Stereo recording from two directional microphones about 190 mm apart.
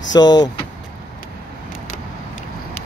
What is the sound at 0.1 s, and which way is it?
Speech, 20° left (ahead or behind).